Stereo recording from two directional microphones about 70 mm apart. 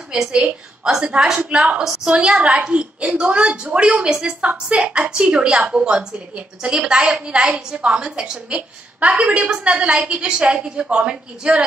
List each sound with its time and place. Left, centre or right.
0.1 s a woman's voice: centre